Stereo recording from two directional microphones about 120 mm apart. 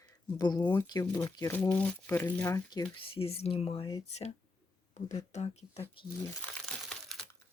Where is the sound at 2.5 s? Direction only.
30° left (ahead or behind).